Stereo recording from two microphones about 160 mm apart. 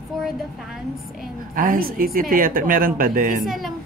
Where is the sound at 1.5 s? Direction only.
60° right (ahead or behind).